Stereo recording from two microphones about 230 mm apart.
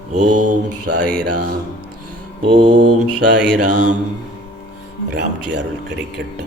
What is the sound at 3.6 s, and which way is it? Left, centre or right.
Mantra, right.